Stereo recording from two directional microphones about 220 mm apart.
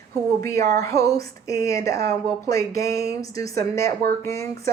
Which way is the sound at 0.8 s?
15° left (ahead or behind).